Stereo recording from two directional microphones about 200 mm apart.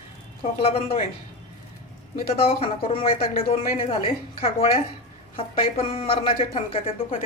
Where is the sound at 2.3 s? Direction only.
30° left (ahead or behind).